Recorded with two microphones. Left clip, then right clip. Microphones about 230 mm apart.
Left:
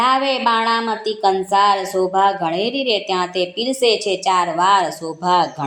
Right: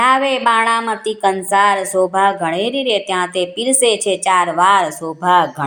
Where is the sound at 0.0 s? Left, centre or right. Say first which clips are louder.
Right 3 dB; right.